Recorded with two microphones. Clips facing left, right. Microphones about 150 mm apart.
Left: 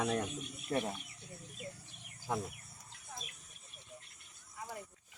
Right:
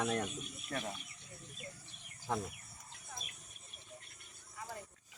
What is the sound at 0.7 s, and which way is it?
Speech, 25° left (ahead or behind).